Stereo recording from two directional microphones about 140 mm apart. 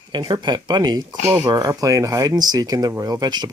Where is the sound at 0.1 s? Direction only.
30° right (ahead or behind).